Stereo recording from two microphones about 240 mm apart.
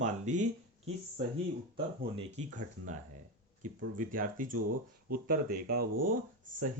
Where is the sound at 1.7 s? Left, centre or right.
Right.